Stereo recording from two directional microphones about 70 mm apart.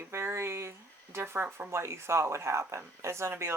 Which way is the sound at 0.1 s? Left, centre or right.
Right.